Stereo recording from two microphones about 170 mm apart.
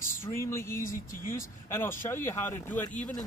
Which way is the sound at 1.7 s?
15° left (ahead or behind).